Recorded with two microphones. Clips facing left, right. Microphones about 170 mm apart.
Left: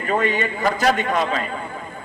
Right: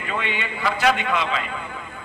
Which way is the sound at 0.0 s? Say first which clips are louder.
Left 7 dB; 40° left (ahead or behind).